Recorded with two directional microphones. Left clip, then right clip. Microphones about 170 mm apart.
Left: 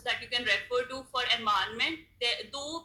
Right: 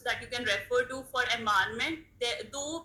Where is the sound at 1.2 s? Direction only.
55° right (ahead or behind).